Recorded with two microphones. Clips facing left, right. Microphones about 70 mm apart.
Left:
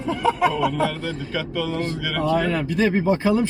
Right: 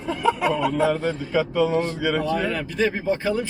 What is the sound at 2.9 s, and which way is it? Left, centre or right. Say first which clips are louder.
Speech: left 4 dB; left.